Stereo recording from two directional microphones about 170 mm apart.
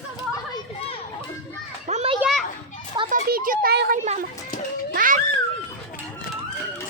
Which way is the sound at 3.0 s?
55° right (ahead or behind).